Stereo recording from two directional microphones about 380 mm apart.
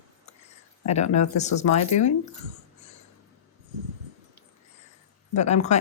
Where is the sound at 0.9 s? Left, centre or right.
Centre.